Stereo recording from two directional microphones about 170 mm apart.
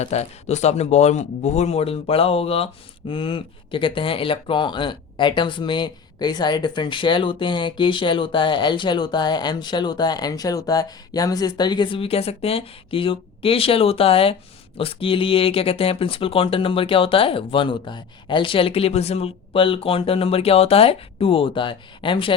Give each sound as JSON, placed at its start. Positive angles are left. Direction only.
{"t": 0.0, "sound": "speech", "side_deg": 40}